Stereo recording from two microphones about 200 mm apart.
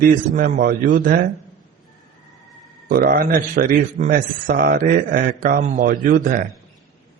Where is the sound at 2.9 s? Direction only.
45° right (ahead or behind).